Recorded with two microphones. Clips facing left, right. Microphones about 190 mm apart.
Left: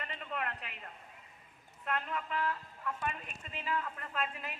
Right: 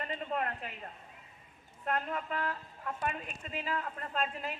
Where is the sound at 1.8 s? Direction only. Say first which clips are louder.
Right 3 dB; 40° right (ahead or behind).